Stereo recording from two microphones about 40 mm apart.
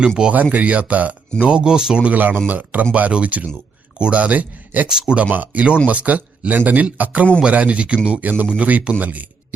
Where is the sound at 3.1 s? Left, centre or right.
Right.